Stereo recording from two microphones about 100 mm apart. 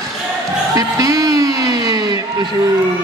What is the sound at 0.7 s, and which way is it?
Music, 35° right (ahead or behind).